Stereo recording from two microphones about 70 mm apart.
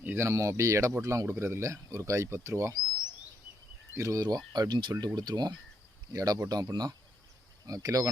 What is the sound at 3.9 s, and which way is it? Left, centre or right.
Speech, right.